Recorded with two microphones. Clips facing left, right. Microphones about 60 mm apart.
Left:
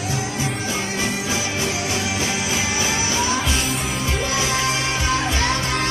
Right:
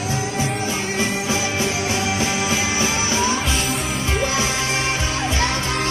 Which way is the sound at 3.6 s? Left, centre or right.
Centre.